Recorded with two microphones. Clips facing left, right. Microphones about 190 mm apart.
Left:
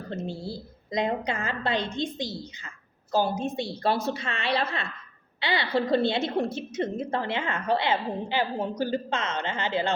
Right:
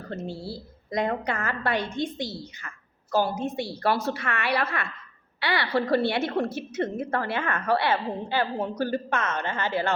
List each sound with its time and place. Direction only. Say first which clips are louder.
0.4 s a woman's voice: even; 20° left (ahead or behind)